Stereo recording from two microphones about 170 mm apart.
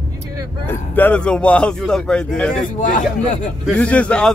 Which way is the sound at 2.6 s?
50° left (ahead or behind).